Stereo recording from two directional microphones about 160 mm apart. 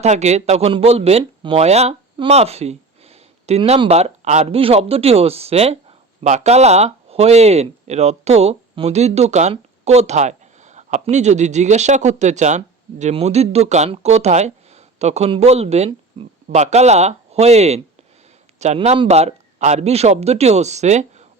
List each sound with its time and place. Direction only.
0.0 s speech: 45° right (ahead or behind)